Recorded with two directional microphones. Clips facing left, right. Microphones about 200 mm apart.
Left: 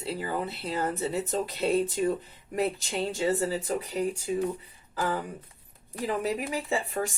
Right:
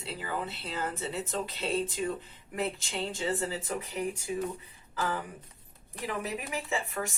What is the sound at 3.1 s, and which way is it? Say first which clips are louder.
Speech: left 6 dB; 35° left (ahead or behind).